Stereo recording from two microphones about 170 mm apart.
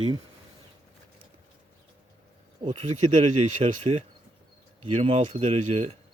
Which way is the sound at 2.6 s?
30° right (ahead or behind).